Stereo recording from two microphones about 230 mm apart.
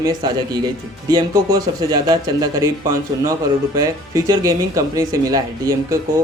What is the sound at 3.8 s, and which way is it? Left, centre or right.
Speech, centre.